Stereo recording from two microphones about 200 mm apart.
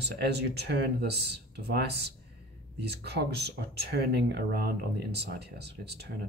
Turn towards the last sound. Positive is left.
turn(degrees=-55)  # may be behind; listen again after turning